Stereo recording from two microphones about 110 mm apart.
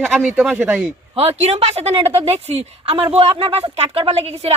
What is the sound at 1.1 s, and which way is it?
A woman's voice, 65° right (ahead or behind).